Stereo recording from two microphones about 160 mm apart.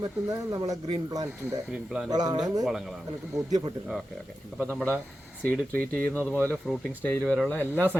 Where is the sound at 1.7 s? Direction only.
5° right (ahead or behind).